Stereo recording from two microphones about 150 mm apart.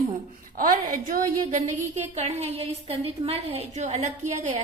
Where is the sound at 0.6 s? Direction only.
65° right (ahead or behind).